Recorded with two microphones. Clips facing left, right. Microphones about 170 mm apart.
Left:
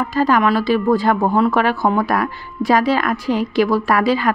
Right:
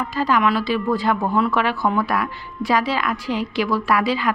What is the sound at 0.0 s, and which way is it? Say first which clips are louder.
A woman's voice: left 4 dB; 45° left (ahead or behind).